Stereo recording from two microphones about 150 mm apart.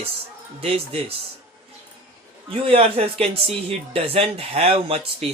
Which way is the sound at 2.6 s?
40° right (ahead or behind).